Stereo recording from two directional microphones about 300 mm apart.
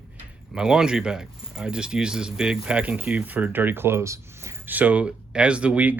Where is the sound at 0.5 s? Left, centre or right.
Centre.